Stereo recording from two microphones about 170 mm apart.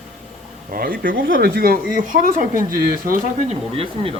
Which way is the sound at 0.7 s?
55° right (ahead or behind).